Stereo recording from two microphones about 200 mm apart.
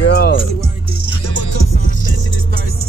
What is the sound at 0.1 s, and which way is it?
Music, 65° left (ahead or behind).